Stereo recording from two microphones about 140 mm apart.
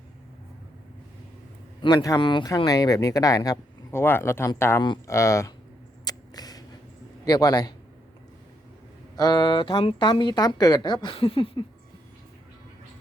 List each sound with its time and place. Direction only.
1.8 s speech: 25° left (ahead or behind)
6.1 s a sound: 25° left (ahead or behind)
7.3 s speech: 25° left (ahead or behind)
9.1 s a woman's voice: 30° left (ahead or behind)